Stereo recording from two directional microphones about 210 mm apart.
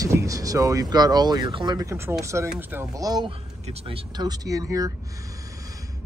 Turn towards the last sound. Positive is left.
turn(degrees=-15)  # may be behind; listen again after turning